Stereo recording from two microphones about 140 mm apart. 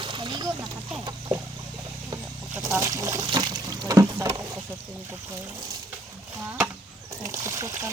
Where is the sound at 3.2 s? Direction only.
30° right (ahead or behind).